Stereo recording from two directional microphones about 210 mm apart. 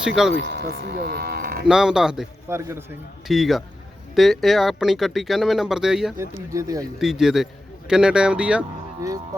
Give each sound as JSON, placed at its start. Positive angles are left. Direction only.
{"t": 0.3, "sound": "speech", "side_deg": -55}
{"t": 1.6, "sound": "speech", "side_deg": -5}
{"t": 3.2, "sound": "speech", "side_deg": 0}
{"t": 6.1, "sound": "speech", "side_deg": -15}
{"t": 7.0, "sound": "speech", "side_deg": 0}